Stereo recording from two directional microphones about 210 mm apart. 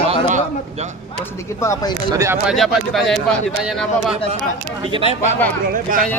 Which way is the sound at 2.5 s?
Centre (ahead or behind).